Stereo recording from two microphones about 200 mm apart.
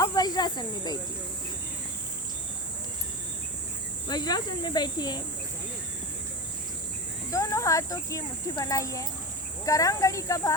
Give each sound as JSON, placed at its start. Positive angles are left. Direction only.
{"t": 0.0, "sound": "cricket", "side_deg": 20}
{"t": 4.1, "sound": "speech", "side_deg": 20}
{"t": 7.3, "sound": "speech", "side_deg": 15}